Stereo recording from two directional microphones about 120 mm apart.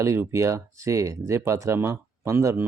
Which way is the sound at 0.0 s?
25° right (ahead or behind).